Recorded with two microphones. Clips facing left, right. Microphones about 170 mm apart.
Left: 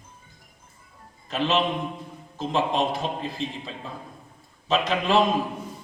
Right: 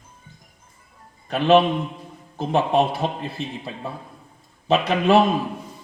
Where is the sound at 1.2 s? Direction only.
60° right (ahead or behind).